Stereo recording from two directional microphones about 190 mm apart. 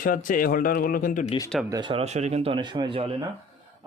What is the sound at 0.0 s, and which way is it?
Speech, 45° left (ahead or behind).